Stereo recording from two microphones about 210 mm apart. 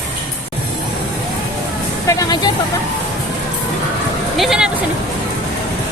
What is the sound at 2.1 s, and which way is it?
Speech, 15° left (ahead or behind).